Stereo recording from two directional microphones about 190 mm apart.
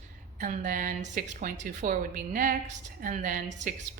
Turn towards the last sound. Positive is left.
turn(degrees=-45)  # may be behind; listen again after turning